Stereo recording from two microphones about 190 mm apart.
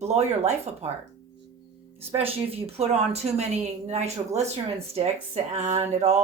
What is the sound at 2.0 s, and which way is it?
Speech, 30° right (ahead or behind).